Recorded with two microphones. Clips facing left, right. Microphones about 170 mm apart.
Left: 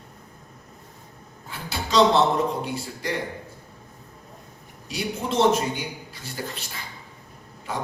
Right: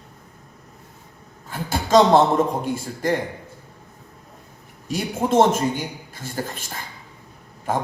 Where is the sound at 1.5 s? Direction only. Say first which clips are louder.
Right 5 dB; 50° right (ahead or behind).